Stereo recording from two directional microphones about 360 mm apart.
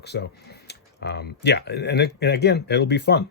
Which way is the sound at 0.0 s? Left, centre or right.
Left.